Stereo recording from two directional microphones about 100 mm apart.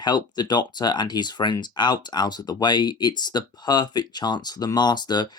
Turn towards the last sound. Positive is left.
turn(degrees=45)  # may be behind; listen again after turning